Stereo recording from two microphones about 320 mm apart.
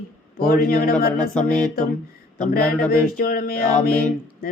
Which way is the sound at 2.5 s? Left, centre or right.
Left.